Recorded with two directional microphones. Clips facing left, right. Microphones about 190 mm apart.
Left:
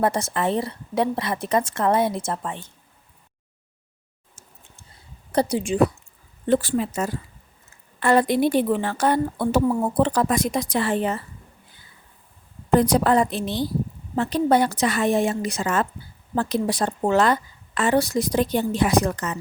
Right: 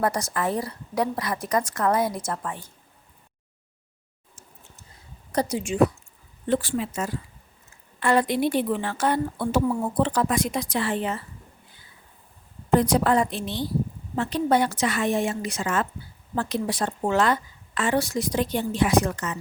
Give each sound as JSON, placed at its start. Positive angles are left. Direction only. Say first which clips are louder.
{"t": 0.0, "sound": "a woman's voice", "louder": "left 3 dB", "side_deg": 25}
{"t": 5.3, "sound": "a woman's voice", "louder": "left 4 dB", "side_deg": 30}
{"t": 12.8, "sound": "a woman's voice", "louder": "left 4 dB", "side_deg": 35}